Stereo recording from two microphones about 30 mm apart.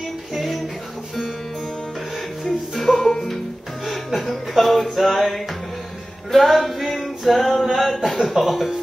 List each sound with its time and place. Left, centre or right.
2.4 s music: centre
3.0 s music: centre
3.8 s chuckle: centre
4.9 s music: centre
8.3 s speech: centre